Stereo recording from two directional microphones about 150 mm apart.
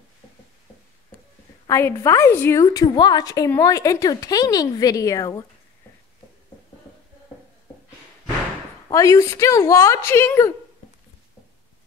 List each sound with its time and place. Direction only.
1.7 s a woman's voice: 20° left (ahead or behind)
8.8 s a woman's voice: 20° left (ahead or behind)